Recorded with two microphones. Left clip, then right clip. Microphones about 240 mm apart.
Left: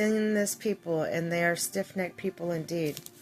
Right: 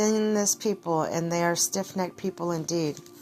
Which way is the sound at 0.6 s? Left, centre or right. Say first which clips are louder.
Right 3 dB; centre.